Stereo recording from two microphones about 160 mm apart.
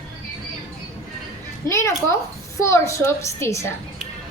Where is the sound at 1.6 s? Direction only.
15° left (ahead or behind).